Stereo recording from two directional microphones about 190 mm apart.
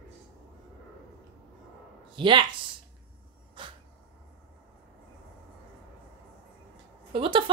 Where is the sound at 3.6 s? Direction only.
25° right (ahead or behind).